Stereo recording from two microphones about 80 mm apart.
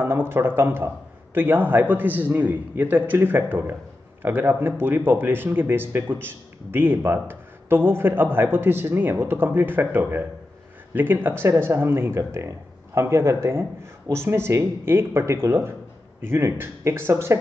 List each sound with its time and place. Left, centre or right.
0.0 s speech: right